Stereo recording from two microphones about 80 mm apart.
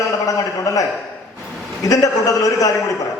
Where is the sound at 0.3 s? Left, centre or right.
Left.